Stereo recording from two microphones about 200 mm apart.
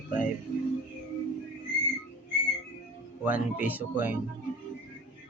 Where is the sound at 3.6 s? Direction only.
10° right (ahead or behind).